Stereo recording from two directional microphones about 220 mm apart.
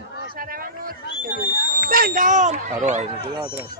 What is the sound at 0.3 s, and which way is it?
Speech, 40° right (ahead or behind).